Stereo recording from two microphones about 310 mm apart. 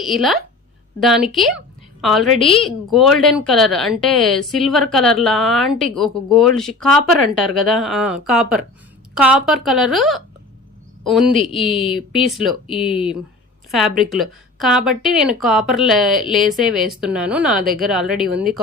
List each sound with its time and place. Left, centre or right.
0.0 s a woman's voice: centre
11.7 s speech: centre
12.1 s a woman's voice: centre
13.7 s a woman's voice: centre